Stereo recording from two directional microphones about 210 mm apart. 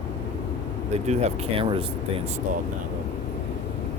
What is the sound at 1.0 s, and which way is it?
Speech, 30° right (ahead or behind).